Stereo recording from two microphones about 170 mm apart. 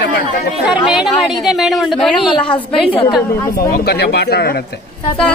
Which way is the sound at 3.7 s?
65° left (ahead or behind).